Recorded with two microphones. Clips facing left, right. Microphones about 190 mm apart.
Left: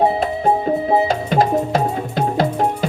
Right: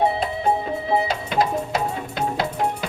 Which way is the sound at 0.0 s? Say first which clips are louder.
Left 4 dB; 40° left (ahead or behind).